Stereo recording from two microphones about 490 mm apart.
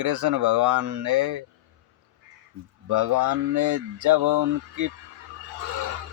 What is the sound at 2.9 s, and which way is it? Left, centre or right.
Speech, right.